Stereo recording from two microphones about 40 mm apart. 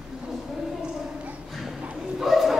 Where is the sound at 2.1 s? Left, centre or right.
Centre.